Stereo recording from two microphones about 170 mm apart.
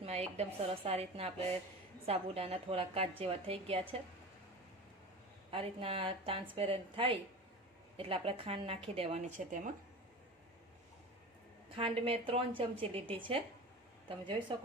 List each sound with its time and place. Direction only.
0.0 s a woman's voice: 40° right (ahead or behind)
5.5 s a woman's voice: 35° right (ahead or behind)
11.8 s a woman's voice: 30° right (ahead or behind)